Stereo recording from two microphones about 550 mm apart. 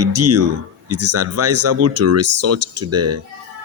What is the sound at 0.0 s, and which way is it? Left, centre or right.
Speech, right.